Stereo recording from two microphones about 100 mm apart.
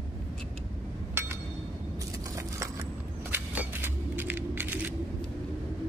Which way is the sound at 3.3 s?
20° right (ahead or behind).